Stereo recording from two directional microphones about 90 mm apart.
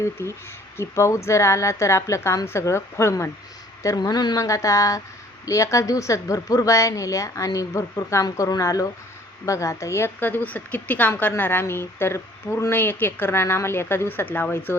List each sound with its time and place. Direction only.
0.0 s a woman's voice: 30° left (ahead or behind); by 4.4 s 50° left (ahead or behind)
4.4 s a woman's voice: 35° left (ahead or behind)